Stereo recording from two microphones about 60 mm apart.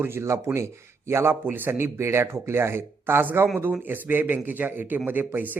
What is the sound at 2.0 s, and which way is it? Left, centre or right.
Speech, right.